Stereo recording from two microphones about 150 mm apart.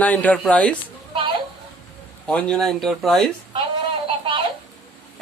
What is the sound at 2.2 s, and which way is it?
Speech, 5° left (ahead or behind).